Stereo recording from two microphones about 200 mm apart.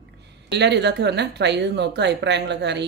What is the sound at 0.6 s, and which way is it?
Speech, 55° right (ahead or behind).